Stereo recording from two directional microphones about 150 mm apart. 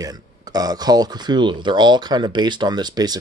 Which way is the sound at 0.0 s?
25° right (ahead or behind).